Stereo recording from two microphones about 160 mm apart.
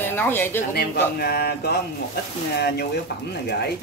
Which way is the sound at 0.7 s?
80° left.